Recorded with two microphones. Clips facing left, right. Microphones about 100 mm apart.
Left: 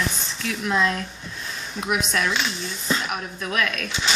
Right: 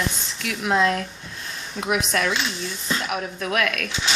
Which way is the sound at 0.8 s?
55° right (ahead or behind).